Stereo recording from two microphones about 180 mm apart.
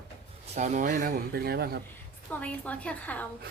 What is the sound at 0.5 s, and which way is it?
Speech, 40° right (ahead or behind).